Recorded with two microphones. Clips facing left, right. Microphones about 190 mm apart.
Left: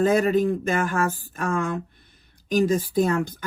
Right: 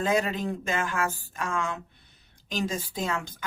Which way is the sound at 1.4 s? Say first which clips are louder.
Left 5 dB; 50° left (ahead or behind).